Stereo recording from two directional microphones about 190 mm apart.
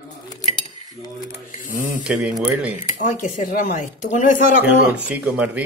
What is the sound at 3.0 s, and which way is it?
Speech, 45° left (ahead or behind).